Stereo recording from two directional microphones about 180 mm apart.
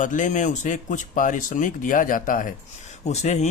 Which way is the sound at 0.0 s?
45° left (ahead or behind).